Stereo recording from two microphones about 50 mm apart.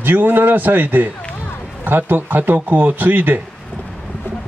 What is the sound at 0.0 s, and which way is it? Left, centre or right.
A man's voice, right.